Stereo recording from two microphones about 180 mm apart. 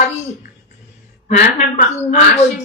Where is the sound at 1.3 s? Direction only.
40° left (ahead or behind).